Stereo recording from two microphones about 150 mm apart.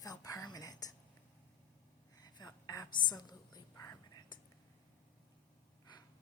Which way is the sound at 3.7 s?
25° left (ahead or behind).